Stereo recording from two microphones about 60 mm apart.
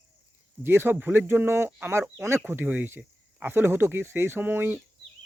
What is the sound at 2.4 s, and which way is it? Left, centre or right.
Speech, right.